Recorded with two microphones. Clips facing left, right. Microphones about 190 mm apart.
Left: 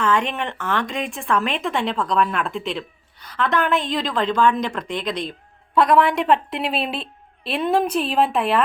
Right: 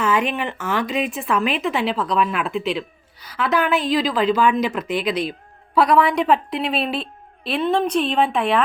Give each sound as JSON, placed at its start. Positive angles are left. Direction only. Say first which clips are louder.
{"t": 0.0, "sound": "a woman's voice", "louder": "right 1 dB", "side_deg": -10}